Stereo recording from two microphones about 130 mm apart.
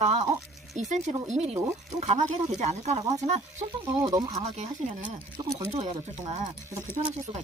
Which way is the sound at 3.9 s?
30° right (ahead or behind).